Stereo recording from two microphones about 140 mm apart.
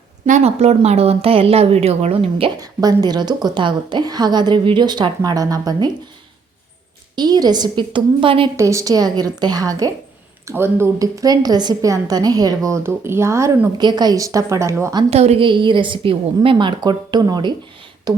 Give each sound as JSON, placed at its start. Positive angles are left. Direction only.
{"t": 0.3, "sound": "a woman's voice", "side_deg": -55}
{"t": 2.6, "sound": "a woman's voice", "side_deg": -30}
{"t": 7.2, "sound": "a woman's voice", "side_deg": -30}
{"t": 8.5, "sound": "a woman's voice", "side_deg": -20}
{"t": 15.1, "sound": "a woman's voice", "side_deg": -50}